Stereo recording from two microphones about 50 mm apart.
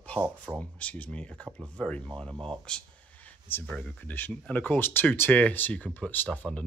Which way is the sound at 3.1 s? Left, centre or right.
Left.